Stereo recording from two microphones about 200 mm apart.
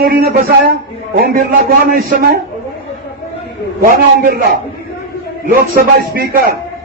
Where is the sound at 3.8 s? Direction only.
50° right (ahead or behind).